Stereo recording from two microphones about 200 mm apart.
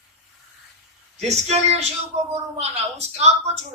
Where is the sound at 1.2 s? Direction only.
30° right (ahead or behind).